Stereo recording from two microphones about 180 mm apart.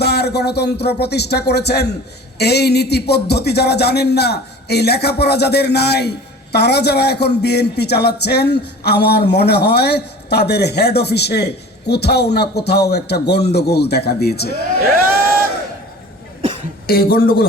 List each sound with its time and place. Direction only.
0.0 s a man's voice: 65° left (ahead or behind)
16.4 s cough: 35° right (ahead or behind)
16.8 s a man's voice: 55° left (ahead or behind)